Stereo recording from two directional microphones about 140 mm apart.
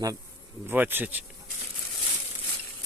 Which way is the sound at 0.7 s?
15° right (ahead or behind).